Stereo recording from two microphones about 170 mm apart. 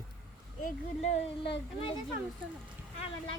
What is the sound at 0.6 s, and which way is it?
Speech, 40° left (ahead or behind).